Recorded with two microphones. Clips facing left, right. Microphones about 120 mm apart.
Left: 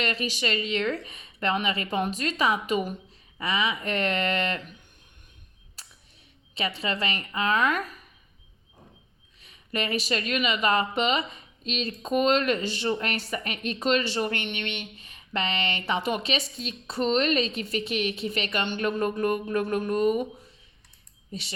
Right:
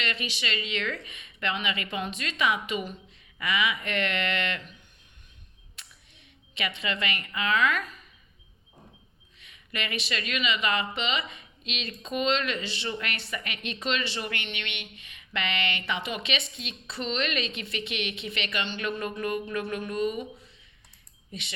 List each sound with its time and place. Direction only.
0.0 s speech: 40° left (ahead or behind)
3.3 s speech: 35° left (ahead or behind)
5.8 s a sound: 35° left (ahead or behind)
6.5 s speech: 35° left (ahead or behind)
9.4 s speech: 40° left (ahead or behind)